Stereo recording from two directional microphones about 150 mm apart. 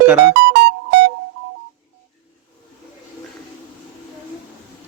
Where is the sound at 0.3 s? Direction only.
90° right.